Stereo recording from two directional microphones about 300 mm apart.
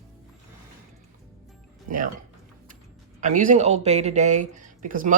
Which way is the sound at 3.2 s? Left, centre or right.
Right.